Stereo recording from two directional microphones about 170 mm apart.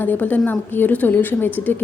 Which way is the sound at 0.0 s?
10° left (ahead or behind).